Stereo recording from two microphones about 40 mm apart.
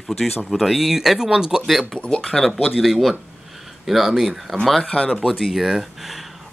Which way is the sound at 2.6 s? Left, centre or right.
Centre.